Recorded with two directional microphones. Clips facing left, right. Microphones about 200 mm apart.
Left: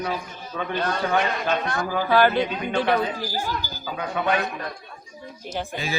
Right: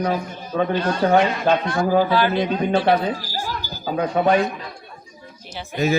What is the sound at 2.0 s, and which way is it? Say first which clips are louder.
Speech: left 1 dB; 50° left (ahead or behind).